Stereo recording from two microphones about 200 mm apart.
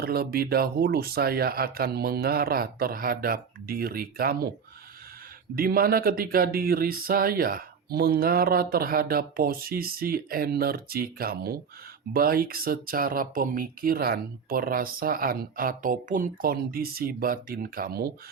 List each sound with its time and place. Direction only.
0.0 s speech: 50° right (ahead or behind)
5.5 s speech: 45° right (ahead or behind)